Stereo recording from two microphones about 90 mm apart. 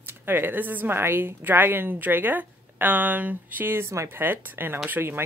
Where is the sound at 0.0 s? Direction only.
25° right (ahead or behind).